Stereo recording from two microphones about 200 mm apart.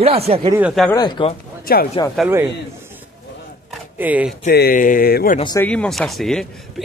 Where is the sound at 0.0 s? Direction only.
30° right (ahead or behind).